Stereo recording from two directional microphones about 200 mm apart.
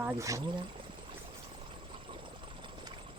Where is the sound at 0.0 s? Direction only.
15° right (ahead or behind).